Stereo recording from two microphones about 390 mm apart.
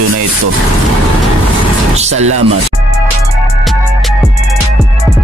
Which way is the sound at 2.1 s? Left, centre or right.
Right.